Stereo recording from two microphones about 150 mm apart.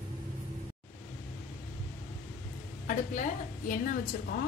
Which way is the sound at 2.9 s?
60° left (ahead or behind).